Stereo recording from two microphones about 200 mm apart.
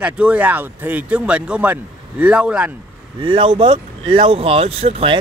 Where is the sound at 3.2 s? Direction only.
25° right (ahead or behind).